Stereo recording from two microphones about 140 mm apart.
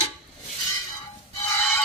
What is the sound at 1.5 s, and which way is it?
Music, 15° left (ahead or behind).